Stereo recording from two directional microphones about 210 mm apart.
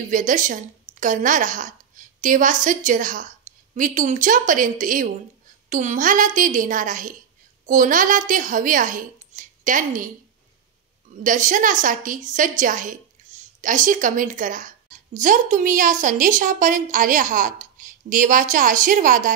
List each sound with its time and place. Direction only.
0.1 s a woman's voice: 40° right (ahead or behind)
11.2 s a woman's voice: 40° right (ahead or behind)